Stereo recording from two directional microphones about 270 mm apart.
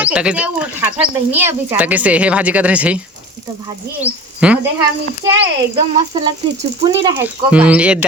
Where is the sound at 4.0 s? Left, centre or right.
Centre.